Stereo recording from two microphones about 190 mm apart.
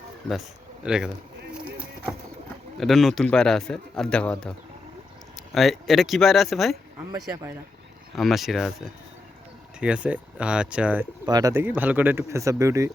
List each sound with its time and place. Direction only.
0.3 s speech: 5° right (ahead or behind)
1.5 s a sound: 5° right (ahead or behind)
2.7 s a man's voice: centre (ahead or behind)
5.5 s a man's voice: centre (ahead or behind)
8.1 s a man's voice: centre (ahead or behind)
11.3 s speech: 20° right (ahead or behind)